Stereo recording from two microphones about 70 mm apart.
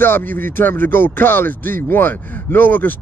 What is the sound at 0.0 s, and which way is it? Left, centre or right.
Speech, left.